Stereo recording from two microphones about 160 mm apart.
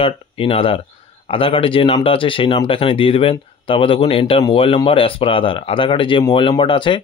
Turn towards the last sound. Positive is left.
turn(degrees=30)  # may be behind; listen again after turning